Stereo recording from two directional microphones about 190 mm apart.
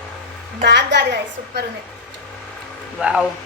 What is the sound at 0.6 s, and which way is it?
A woman's voice, 65° right (ahead or behind).